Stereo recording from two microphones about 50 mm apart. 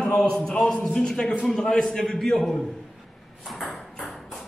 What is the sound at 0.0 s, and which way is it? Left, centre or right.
A man's voice, centre.